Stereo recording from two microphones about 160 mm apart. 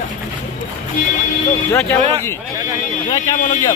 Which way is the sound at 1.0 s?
55° left (ahead or behind).